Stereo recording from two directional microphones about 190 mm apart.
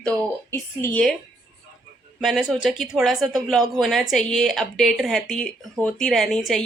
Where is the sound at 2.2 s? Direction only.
Centre (ahead or behind).